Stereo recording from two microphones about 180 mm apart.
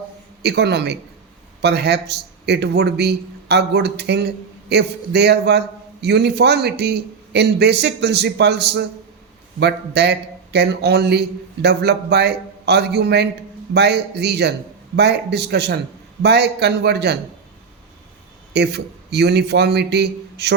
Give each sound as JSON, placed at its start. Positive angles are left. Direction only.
{"t": 0.4, "sound": "a man's voice", "side_deg": -70}
{"t": 18.5, "sound": "a man's voice", "side_deg": -65}